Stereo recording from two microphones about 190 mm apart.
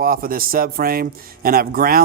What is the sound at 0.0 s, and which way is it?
Speech, 50° right (ahead or behind).